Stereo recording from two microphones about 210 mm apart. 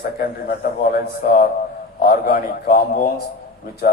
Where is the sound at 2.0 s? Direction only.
45° left (ahead or behind).